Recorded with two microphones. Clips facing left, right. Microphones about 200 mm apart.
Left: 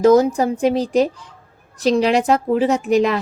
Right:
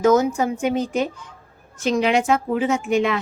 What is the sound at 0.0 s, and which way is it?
A woman's voice, 35° left (ahead or behind).